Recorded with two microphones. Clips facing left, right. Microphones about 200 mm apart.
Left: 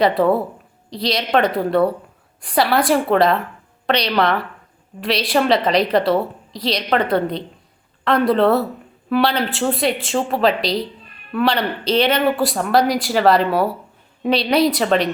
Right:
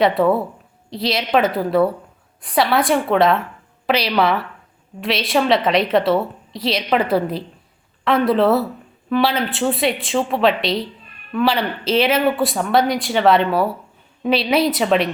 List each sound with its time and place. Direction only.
0.0 s speech: centre (ahead or behind)